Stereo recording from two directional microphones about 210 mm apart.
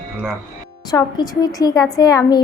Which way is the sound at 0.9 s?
15° left (ahead or behind).